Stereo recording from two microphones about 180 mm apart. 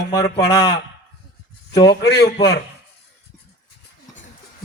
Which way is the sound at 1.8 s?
65° left (ahead or behind).